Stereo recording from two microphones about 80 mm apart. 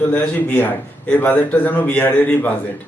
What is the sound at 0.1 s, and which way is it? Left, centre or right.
Speech, centre.